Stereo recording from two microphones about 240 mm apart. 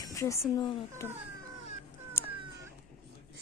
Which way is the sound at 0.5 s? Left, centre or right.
Centre.